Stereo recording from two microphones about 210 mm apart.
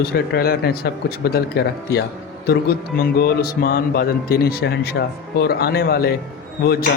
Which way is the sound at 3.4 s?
45° left (ahead or behind).